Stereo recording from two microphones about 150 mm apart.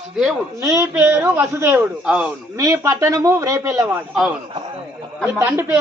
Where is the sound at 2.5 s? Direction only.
20° right (ahead or behind).